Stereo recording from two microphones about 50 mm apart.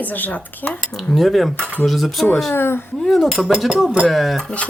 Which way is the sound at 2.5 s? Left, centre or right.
Left.